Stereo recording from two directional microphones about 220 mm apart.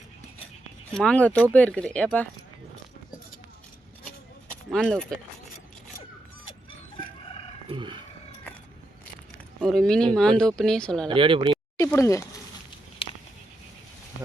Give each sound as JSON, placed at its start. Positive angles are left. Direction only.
{"t": 0.9, "sound": "speech", "side_deg": 5}
{"t": 4.7, "sound": "speech", "side_deg": 5}
{"t": 7.7, "sound": "roaring cats", "side_deg": -20}
{"t": 9.6, "sound": "speech", "side_deg": 0}
{"t": 11.1, "sound": "speech", "side_deg": -25}
{"t": 11.8, "sound": "speech", "side_deg": 15}